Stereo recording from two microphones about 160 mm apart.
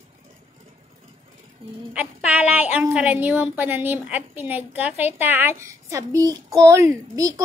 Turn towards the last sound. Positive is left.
turn(degrees=-20)  # may be behind; listen again after turning